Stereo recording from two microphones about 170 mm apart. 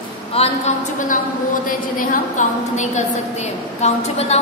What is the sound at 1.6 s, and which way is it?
A woman's voice, 50° left (ahead or behind).